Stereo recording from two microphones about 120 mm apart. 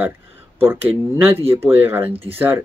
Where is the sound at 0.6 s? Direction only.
20° right (ahead or behind).